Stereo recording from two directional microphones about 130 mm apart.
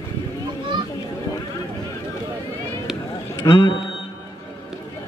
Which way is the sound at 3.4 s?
25° left (ahead or behind).